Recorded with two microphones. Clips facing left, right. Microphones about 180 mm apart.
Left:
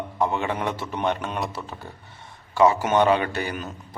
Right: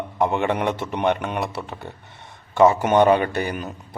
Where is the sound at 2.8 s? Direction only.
50° right (ahead or behind).